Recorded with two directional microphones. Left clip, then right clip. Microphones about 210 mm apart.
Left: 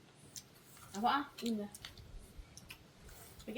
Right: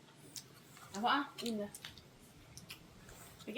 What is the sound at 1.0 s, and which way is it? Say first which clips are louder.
Speech: even; 10° right (ahead or behind).